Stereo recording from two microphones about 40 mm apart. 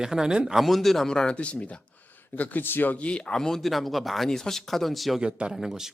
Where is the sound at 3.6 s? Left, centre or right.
Centre.